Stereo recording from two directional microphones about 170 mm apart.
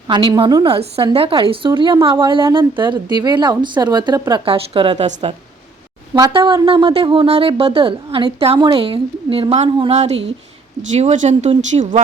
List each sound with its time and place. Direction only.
0.1 s a woman's voice: 30° right (ahead or behind)
6.1 s speech: 25° right (ahead or behind); by 11.9 s 45° right (ahead or behind)